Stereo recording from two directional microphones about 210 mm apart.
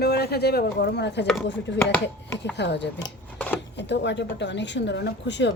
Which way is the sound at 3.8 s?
55° left (ahead or behind).